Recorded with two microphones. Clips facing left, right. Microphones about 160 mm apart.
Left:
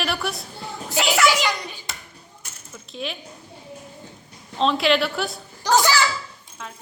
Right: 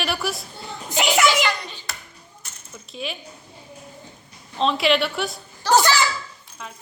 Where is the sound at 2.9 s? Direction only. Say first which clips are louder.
Even; centre (ahead or behind).